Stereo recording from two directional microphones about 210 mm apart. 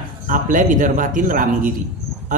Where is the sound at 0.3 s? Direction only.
40° right (ahead or behind).